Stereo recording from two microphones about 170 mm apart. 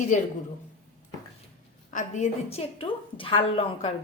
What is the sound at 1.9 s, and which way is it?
Speech, 45° left (ahead or behind).